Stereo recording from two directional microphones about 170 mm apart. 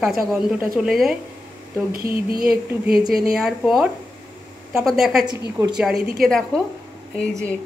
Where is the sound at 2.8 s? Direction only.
5° right (ahead or behind).